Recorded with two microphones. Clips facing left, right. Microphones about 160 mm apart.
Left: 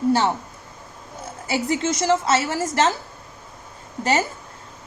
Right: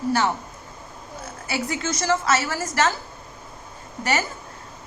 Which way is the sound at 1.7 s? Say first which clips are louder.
Left 4 dB; 20° left (ahead or behind).